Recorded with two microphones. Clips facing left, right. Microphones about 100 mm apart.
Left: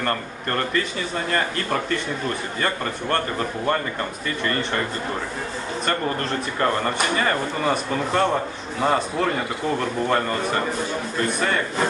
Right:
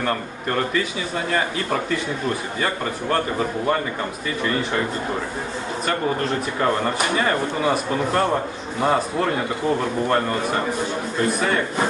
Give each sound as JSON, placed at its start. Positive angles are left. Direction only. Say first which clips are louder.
{"t": 0.0, "sound": "speech", "louder": "right 1 dB", "side_deg": -5}
{"t": 5.9, "sound": "speech", "louder": "right 2 dB", "side_deg": -5}